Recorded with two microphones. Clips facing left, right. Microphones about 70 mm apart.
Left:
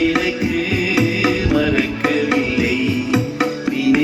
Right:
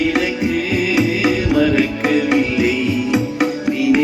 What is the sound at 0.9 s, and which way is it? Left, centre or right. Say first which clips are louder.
Music: even; centre.